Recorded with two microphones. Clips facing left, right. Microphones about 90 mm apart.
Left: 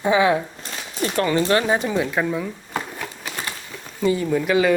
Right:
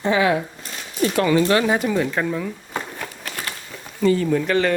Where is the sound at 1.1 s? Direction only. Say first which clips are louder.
Right 1 dB; 35° left (ahead or behind).